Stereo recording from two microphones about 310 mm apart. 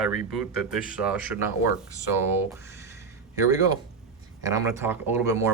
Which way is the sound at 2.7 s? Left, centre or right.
Centre.